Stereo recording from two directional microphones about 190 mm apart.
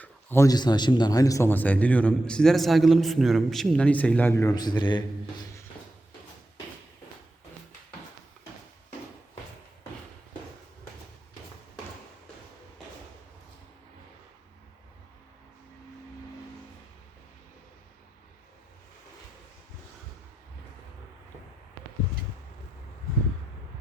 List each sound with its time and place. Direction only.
0.0 s a man's voice: 10° left (ahead or behind)